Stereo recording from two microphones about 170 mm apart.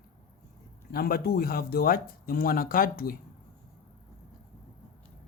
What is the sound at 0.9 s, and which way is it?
Speech, 65° left (ahead or behind).